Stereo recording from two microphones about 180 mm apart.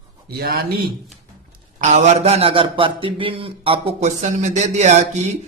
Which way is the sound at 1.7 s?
45° right (ahead or behind).